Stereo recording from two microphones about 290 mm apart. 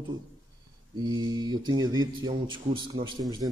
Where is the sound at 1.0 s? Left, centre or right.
Centre.